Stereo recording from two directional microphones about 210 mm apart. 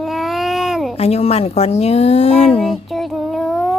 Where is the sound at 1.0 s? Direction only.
30° left (ahead or behind).